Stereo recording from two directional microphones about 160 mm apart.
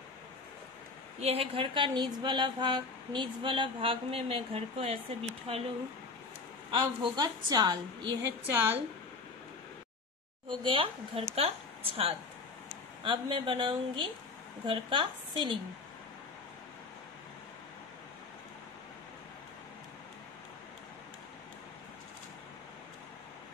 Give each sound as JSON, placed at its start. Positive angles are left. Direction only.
{"t": 1.2, "sound": "speech", "side_deg": -35}
{"t": 6.7, "sound": "a woman's voice", "side_deg": -30}
{"t": 8.5, "sound": "speech", "side_deg": -15}
{"t": 10.6, "sound": "a woman's voice", "side_deg": -35}